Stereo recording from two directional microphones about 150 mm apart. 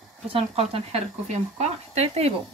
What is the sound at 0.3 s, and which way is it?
Speech, 40° right (ahead or behind).